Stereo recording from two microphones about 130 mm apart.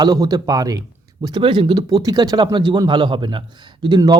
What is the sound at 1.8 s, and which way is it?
Speech, 25° right (ahead or behind).